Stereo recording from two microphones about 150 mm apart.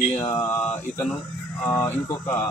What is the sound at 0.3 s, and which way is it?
Speech, 25° left (ahead or behind).